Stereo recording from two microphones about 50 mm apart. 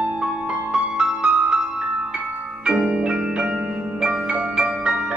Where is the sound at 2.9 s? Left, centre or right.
Right.